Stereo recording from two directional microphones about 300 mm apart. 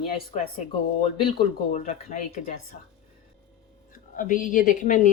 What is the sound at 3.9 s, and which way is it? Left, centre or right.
A woman's voice, left.